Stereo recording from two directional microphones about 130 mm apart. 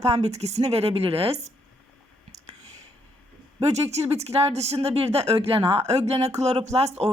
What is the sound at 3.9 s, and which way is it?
A woman's voice, 55° right (ahead or behind).